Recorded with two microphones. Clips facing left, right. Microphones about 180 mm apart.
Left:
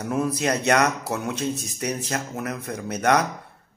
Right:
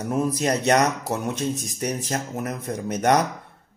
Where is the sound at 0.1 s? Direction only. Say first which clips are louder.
Right 1 dB; 20° right (ahead or behind).